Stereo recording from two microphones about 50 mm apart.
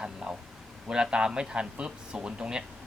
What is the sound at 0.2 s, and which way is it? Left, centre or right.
Speech, centre.